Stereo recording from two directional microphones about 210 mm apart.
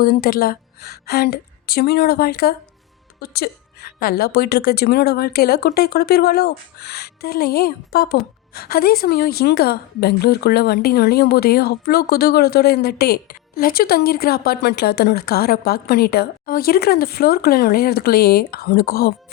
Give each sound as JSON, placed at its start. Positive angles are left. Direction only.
{"t": 0.0, "sound": "a woman's voice", "side_deg": 45}